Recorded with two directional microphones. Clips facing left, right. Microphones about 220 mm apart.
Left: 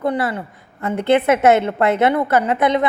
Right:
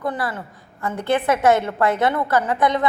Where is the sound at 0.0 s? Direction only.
25° left (ahead or behind).